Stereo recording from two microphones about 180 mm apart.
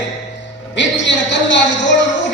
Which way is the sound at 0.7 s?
85° left.